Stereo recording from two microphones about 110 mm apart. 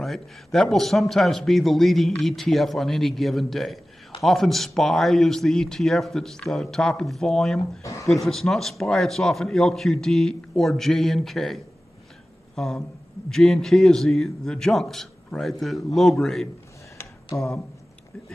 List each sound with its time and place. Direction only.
0.0 s a man's voice: 5° left (ahead or behind)
7.8 s speech: 30° left (ahead or behind)
8.1 s a man's voice: centre (ahead or behind)
12.5 s a sound: 5° left (ahead or behind)
13.3 s a man's voice: 5° left (ahead or behind)
17.3 s speech: 30° left (ahead or behind)